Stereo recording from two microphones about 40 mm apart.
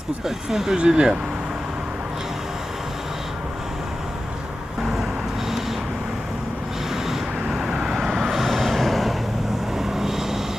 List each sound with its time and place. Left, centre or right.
0.3 s speech: centre
0.8 s speech: right
4.8 s vehicle: centre
7.4 s vehicle: centre
7.9 s vehicle: centre
9.7 s vehicle: centre